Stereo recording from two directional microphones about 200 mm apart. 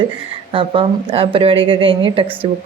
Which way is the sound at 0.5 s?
25° right (ahead or behind).